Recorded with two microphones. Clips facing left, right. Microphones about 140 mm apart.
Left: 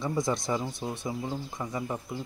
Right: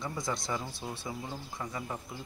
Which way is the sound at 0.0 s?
20° left (ahead or behind).